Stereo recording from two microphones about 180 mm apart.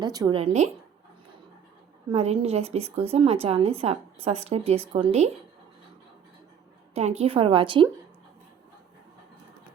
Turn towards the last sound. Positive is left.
turn(degrees=-30)  # may be behind; listen again after turning